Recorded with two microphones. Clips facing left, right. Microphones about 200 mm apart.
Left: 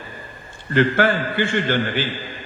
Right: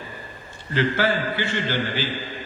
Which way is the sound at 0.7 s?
55° left (ahead or behind).